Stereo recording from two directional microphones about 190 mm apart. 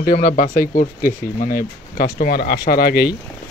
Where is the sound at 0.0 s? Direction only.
45° left (ahead or behind).